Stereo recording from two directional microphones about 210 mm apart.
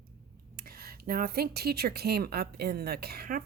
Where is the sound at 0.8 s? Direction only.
45° right (ahead or behind).